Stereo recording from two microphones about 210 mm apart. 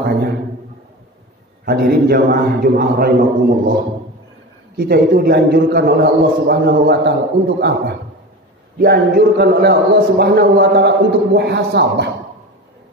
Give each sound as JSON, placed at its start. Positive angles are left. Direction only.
{"t": 0.0, "sound": "a sound", "side_deg": -50}
{"t": 1.7, "sound": "speech", "side_deg": -50}
{"t": 4.7, "sound": "speech", "side_deg": -50}